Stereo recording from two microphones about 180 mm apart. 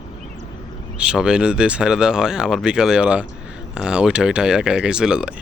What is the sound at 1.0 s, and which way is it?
Speech, 5° right (ahead or behind).